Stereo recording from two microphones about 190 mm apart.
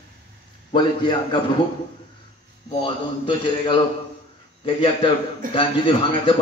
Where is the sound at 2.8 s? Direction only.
25° left (ahead or behind).